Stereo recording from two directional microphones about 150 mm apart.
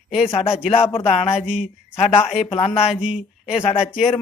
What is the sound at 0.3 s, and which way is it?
Speech, 40° left (ahead or behind).